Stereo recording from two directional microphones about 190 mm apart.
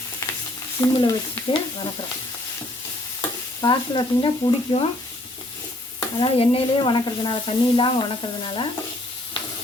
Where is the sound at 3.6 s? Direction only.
25° left (ahead or behind).